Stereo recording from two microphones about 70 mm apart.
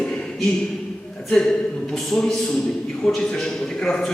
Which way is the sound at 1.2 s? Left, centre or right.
Centre.